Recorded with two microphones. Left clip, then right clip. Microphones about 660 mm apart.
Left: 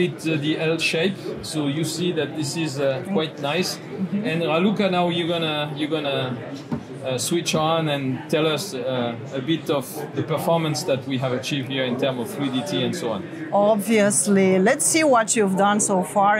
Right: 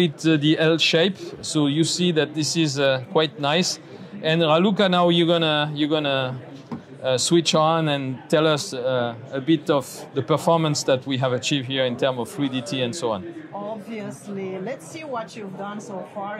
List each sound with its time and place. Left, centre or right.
0.0 s a man's voice: right
13.9 s a woman's voice: left